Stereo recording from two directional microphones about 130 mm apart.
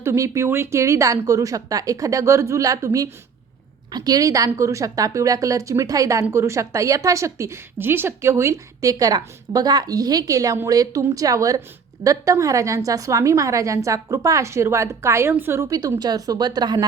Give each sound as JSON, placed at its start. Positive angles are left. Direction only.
{"t": 0.0, "sound": "a woman's voice", "side_deg": -20}